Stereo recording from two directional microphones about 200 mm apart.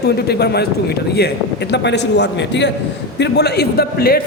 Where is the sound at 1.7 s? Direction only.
60° left (ahead or behind).